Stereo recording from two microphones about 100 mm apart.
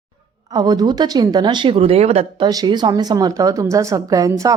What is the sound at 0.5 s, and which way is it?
Speech, 40° right (ahead or behind).